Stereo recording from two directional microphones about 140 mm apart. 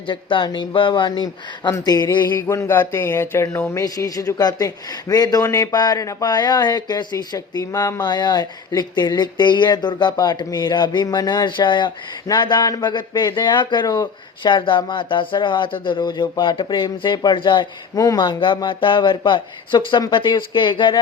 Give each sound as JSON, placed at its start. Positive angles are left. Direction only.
{"t": 0.1, "sound": "speech", "side_deg": 35}